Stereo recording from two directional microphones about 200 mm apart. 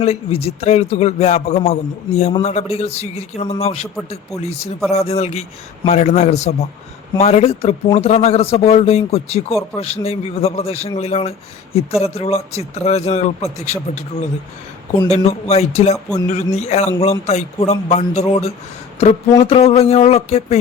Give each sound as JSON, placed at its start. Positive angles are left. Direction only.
{"t": 0.0, "sound": "speech", "side_deg": 30}
{"t": 4.9, "sound": "speech", "side_deg": 30}